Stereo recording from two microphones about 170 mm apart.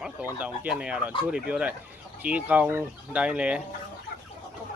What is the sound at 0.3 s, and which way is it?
Speech, 10° right (ahead or behind).